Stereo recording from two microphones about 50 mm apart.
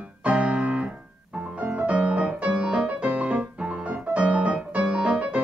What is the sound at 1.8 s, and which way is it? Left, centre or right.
Music, right.